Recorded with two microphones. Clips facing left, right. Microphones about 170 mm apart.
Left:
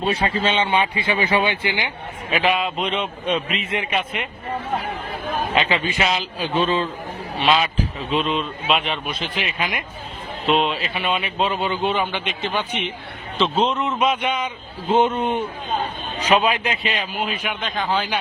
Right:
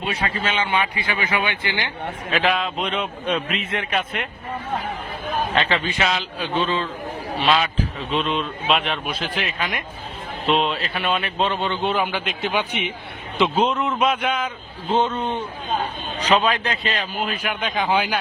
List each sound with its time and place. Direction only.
0.0 s speech: 30° left (ahead or behind)
2.3 s a man's voice: 5° left (ahead or behind)
5.5 s a man's voice: 5° left (ahead or behind)
7.3 s a man's voice: centre (ahead or behind)
14.3 s a man's voice: 10° left (ahead or behind)
17.6 s a man's voice: 10° right (ahead or behind)